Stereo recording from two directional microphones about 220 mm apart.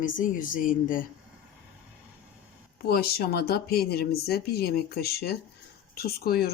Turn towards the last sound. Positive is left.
turn(degrees=45)  # may be behind; listen again after turning